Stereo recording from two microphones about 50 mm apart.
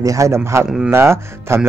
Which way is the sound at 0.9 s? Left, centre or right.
Right.